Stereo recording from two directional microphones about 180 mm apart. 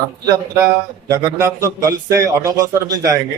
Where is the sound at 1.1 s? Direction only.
20° right (ahead or behind).